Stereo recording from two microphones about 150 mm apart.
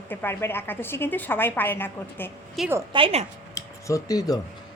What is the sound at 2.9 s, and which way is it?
Speech, 40° right (ahead or behind).